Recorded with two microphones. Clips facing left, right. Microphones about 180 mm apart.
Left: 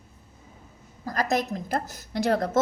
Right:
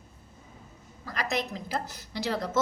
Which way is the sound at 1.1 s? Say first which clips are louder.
Left 6 dB; 45° left (ahead or behind).